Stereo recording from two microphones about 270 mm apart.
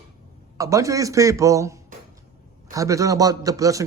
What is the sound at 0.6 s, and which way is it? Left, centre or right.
A man's voice, centre.